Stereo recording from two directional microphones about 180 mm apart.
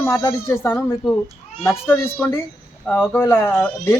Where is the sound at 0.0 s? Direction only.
20° left (ahead or behind).